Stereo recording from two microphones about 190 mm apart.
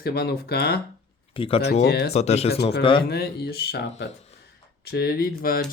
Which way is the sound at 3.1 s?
60° left (ahead or behind).